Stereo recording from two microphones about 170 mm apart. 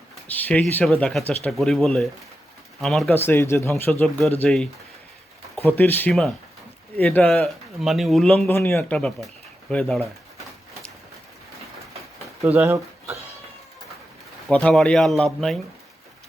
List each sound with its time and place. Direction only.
0.3 s speech: 10° left (ahead or behind)
3.1 s speech: 10° left (ahead or behind)
4.4 s speech: centre (ahead or behind)
8.4 s speech: 15° left (ahead or behind)
12.5 s speech: 15° right (ahead or behind)
14.5 s speech: 5° left (ahead or behind)